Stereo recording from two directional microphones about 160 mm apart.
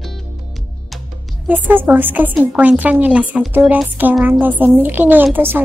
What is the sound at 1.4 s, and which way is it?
Speech, 10° right (ahead or behind).